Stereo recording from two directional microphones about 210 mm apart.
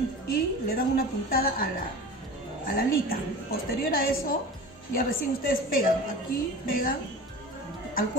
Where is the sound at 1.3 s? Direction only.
45° left (ahead or behind).